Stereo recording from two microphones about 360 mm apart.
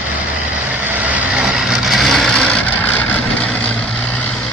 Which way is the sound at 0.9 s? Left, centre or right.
Centre.